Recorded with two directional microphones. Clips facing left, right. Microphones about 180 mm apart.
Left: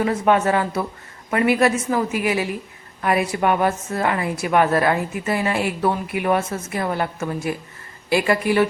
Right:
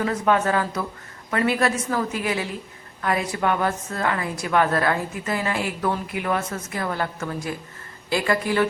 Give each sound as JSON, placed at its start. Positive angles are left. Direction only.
{"t": 0.0, "sound": "a woman's voice", "side_deg": 20}